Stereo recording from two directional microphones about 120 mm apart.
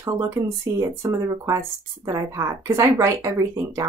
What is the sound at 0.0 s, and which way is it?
Speech, 25° right (ahead or behind).